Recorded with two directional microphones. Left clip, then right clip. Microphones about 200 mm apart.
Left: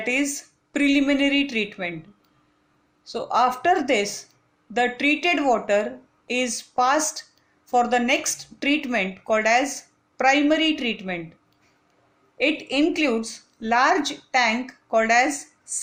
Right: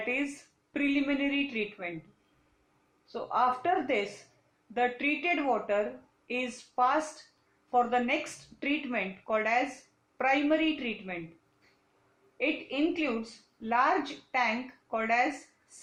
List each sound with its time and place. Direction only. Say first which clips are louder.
0.0 s a woman's voice: left 8 dB; 45° left (ahead or behind)
3.1 s speech: left 7 dB; 50° left (ahead or behind)
12.4 s speech: left 9 dB; 45° left (ahead or behind)